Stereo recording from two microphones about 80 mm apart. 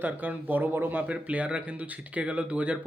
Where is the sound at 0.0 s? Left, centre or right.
Right.